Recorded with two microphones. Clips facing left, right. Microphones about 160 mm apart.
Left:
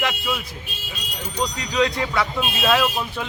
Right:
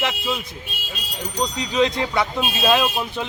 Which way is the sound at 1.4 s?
20° right (ahead or behind).